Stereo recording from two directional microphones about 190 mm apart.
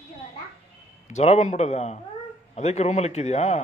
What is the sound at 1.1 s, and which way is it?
A man's voice, 35° left (ahead or behind).